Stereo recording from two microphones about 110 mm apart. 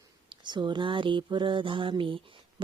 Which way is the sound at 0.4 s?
45° right (ahead or behind).